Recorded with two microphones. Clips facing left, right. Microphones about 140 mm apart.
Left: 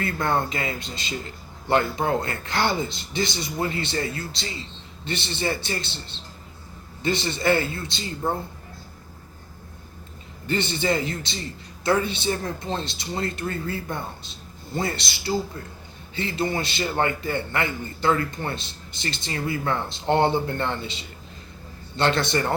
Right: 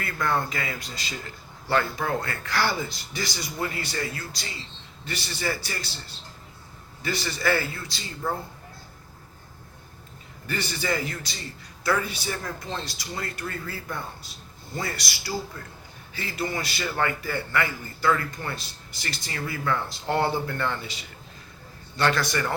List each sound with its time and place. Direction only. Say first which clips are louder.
0.0 s a man's voice: left 3 dB; 25° left (ahead or behind)
10.4 s a man's voice: left 5 dB; 25° left (ahead or behind)